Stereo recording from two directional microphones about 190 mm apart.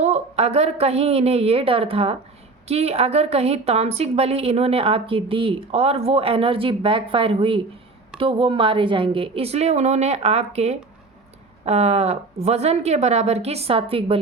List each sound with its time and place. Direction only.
0.0 s a woman's voice: 35° right (ahead or behind)